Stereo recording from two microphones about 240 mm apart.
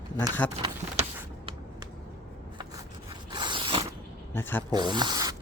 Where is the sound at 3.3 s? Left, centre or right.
Centre.